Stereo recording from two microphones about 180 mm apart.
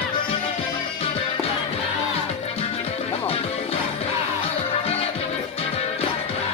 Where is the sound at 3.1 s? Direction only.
35° left (ahead or behind).